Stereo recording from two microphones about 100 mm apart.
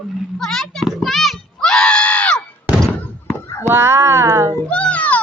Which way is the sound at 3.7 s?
25° right (ahead or behind).